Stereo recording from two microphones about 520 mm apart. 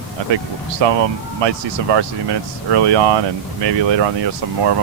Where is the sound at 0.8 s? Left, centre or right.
Right.